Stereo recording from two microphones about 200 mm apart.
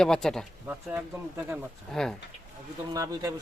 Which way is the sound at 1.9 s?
5° left (ahead or behind).